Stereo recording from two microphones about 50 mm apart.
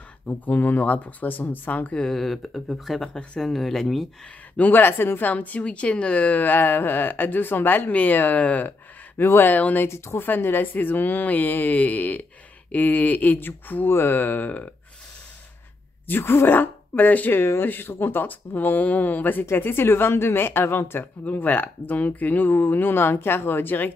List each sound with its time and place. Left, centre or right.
0.5 s speech: left
2.0 s speech: centre
4.6 s speech: left
5.3 s speech: left
9.2 s speech: left
9.5 s speech: left
9.8 s speech: left
10.2 s speech: left
16.1 s speech: left
19.5 s a woman's voice: left
21.0 s speech: left